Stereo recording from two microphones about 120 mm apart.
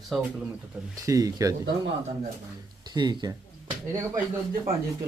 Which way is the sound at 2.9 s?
35° right (ahead or behind).